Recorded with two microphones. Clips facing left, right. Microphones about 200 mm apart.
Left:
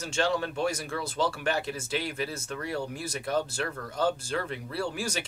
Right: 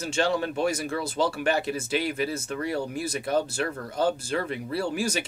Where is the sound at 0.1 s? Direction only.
15° right (ahead or behind).